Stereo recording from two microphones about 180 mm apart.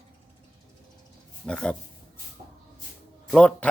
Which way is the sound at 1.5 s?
5° left (ahead or behind).